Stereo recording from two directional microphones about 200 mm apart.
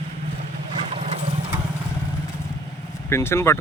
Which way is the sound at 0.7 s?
30° right (ahead or behind).